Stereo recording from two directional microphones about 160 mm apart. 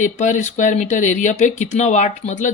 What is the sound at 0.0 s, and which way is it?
Speech, 50° left (ahead or behind).